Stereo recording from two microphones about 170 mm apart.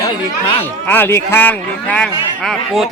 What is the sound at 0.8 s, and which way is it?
A man's voice, 10° left (ahead or behind).